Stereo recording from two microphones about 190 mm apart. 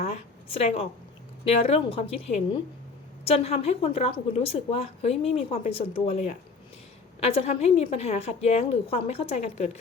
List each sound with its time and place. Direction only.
0.0 s a woman's voice: 35° left (ahead or behind)